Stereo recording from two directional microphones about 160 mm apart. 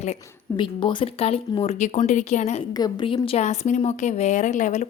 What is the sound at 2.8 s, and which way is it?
Speech, 25° left (ahead or behind).